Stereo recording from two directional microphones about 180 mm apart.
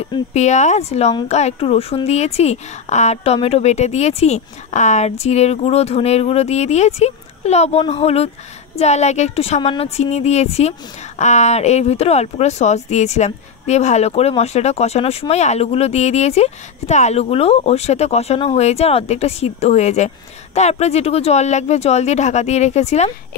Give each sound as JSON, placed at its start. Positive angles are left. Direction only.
{"t": 0.0, "sound": "speech", "side_deg": 35}